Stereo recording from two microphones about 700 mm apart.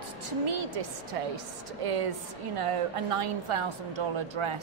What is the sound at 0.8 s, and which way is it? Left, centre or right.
Speech, right.